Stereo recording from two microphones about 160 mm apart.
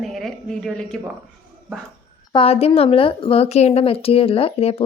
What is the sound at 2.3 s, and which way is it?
A woman's voice, 35° left (ahead or behind).